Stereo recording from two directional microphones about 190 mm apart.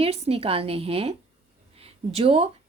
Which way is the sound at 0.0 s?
30° right (ahead or behind).